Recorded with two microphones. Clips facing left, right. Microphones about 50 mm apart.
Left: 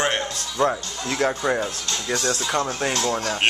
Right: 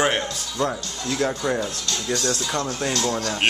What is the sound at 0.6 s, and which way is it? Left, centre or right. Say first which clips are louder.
Speech: left 3 dB; left.